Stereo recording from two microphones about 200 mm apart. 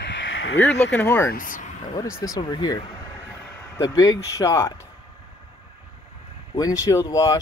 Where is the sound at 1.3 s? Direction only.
40° left (ahead or behind).